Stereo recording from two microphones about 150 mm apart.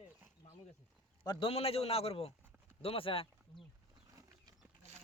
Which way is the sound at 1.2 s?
40° left (ahead or behind).